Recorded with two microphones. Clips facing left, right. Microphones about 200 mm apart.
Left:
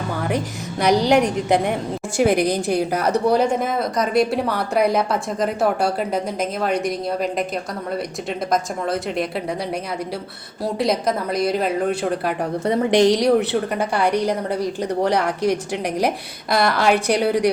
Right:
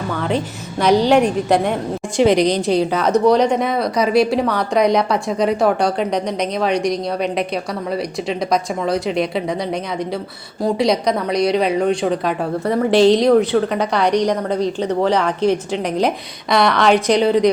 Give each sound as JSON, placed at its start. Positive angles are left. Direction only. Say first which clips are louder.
{"t": 0.3, "sound": "a woman's voice", "louder": "right 2 dB", "side_deg": 10}
{"t": 10.6, "sound": "a woman's voice", "louder": "right 4 dB", "side_deg": 5}
{"t": 12.6, "sound": "a woman's voice", "louder": "right 3 dB", "side_deg": 20}